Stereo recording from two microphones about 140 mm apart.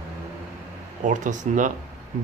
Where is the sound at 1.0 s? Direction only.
65° right (ahead or behind).